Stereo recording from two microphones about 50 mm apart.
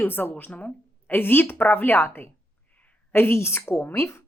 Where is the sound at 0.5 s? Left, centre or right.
Left.